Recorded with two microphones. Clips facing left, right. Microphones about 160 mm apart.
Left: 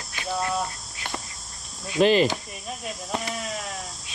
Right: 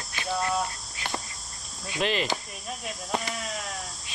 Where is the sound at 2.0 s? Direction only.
35° left (ahead or behind).